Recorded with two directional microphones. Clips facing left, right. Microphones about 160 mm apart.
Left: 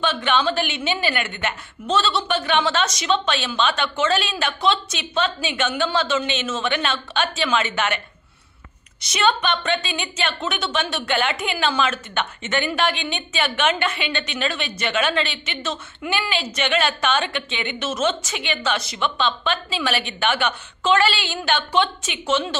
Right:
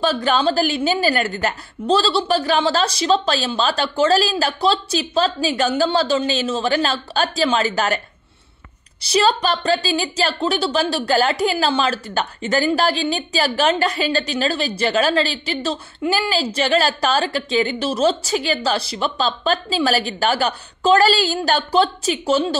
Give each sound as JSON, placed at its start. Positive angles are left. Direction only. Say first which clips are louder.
{"t": 0.0, "sound": "a woman's voice", "louder": "right 3 dB", "side_deg": -35}
{"t": 9.0, "sound": "a woman's voice", "louder": "right 4 dB", "side_deg": -35}